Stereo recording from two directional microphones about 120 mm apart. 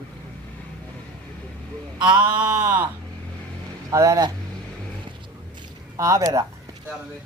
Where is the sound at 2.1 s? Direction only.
10° right (ahead or behind).